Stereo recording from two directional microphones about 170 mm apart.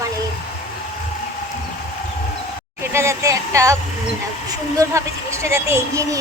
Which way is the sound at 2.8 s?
15° right (ahead or behind).